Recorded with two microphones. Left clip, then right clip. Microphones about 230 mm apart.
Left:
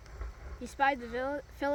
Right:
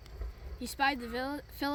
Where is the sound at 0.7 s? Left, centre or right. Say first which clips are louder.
Left 2 dB; right.